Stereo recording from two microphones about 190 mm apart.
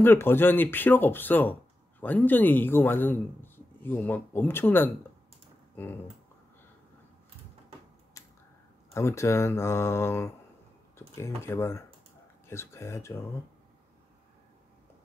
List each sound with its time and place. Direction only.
0.0 s speech: 10° left (ahead or behind)
8.2 s a sound: 15° left (ahead or behind)
8.9 s speech: 15° left (ahead or behind)